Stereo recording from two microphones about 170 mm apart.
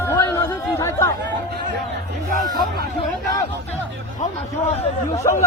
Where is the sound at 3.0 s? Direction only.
20° left (ahead or behind).